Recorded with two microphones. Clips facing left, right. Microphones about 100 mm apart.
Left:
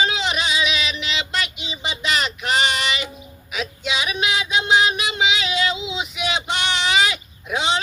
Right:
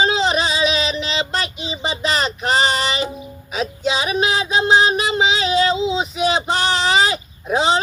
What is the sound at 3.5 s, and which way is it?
Female singing, 35° right (ahead or behind).